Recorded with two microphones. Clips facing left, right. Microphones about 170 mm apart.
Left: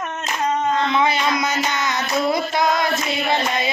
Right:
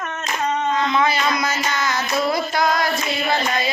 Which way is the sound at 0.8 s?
20° left (ahead or behind).